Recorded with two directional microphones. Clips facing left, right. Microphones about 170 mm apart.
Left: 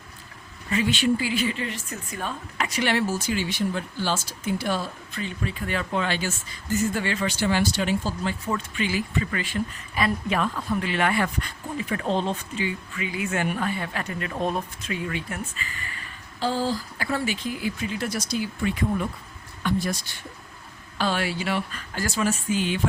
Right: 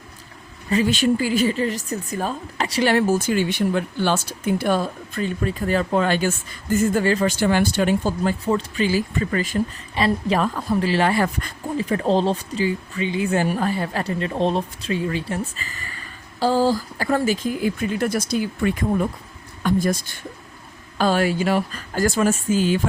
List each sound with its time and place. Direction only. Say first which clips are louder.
0.7 s speech: right 4 dB; 40° right (ahead or behind)
2.9 s speech: right 6 dB; 50° right (ahead or behind)
8.4 s speech: right 7 dB; 35° right (ahead or behind); by 20.0 s 50° right (ahead or behind)
21.0 s speech: right 7 dB; 45° right (ahead or behind)